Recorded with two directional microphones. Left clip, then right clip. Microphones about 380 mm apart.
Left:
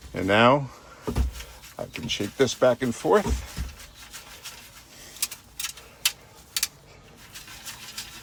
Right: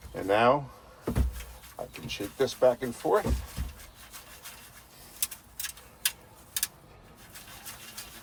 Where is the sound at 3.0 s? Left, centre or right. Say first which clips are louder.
Left 5 dB; left.